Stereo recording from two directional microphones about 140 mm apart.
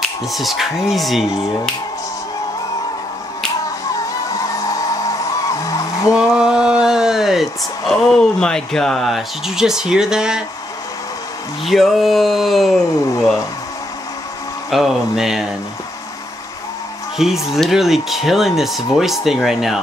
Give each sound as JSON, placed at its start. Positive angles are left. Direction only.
{"t": 0.3, "sound": "speech", "side_deg": 0}
{"t": 4.5, "sound": "music", "side_deg": 25}
{"t": 6.1, "sound": "speech", "side_deg": -5}
{"t": 11.6, "sound": "speech", "side_deg": 0}
{"t": 14.7, "sound": "speech", "side_deg": 0}
{"t": 17.5, "sound": "speech", "side_deg": 0}